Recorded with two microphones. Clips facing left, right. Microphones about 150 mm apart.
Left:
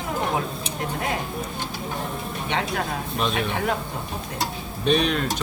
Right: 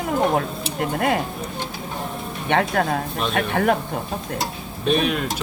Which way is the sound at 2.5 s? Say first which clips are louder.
Right 7 dB; 55° right (ahead or behind).